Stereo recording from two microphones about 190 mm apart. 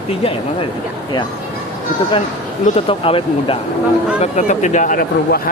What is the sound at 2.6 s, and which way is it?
Speech, 30° left (ahead or behind).